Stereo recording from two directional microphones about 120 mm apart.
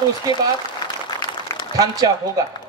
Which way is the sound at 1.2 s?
40° left (ahead or behind).